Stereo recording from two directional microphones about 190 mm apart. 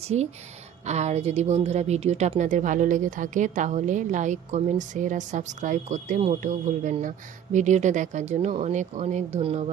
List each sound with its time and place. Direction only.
0.0 s speech: 35° right (ahead or behind)